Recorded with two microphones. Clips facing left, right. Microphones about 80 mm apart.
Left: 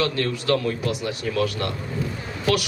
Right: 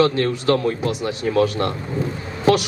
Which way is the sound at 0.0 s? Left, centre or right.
Right.